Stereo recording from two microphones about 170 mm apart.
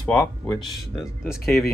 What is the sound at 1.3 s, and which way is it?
Speech, centre (ahead or behind).